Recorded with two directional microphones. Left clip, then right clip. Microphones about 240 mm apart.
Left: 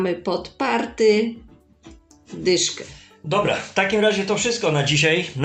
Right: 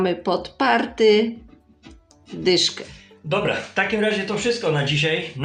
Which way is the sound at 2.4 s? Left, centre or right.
Centre.